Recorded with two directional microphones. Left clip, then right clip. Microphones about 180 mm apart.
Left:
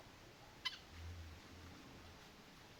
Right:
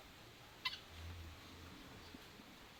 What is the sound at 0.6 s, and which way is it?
Cat, 40° right (ahead or behind).